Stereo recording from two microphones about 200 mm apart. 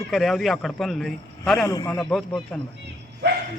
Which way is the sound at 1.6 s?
15° left (ahead or behind).